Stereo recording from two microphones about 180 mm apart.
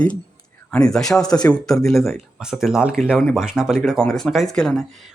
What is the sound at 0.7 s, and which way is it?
Speech, 5° left (ahead or behind).